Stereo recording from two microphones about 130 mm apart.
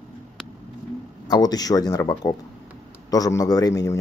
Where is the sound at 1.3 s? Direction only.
30° left (ahead or behind).